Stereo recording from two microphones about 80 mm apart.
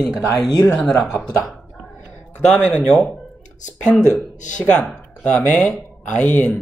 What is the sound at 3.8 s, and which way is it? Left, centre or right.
Speech, centre.